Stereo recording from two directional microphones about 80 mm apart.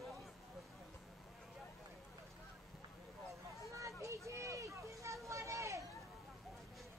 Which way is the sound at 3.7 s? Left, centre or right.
Right.